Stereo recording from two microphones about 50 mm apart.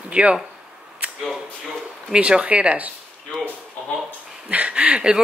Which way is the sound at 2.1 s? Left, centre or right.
Centre.